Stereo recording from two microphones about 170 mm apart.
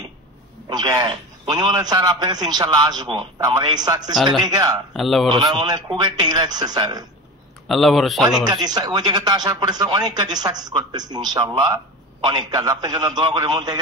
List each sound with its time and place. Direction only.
0.7 s a man's voice: 20° right (ahead or behind)
4.1 s speech: centre (ahead or behind)
4.5 s a man's voice: 20° right (ahead or behind)
4.9 s speech: centre (ahead or behind)
5.3 s a man's voice: 25° right (ahead or behind)
7.6 s speech: centre (ahead or behind)
8.5 s a man's voice: 25° right (ahead or behind)